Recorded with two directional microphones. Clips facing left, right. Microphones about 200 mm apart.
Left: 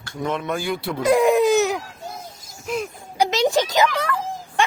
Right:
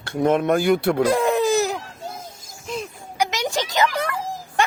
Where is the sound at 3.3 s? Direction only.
20° left (ahead or behind).